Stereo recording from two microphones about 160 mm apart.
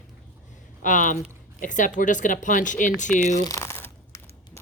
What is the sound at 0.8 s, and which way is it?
A woman's voice, 55° left (ahead or behind).